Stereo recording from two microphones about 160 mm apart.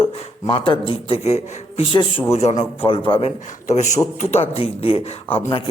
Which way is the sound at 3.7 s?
45° left (ahead or behind).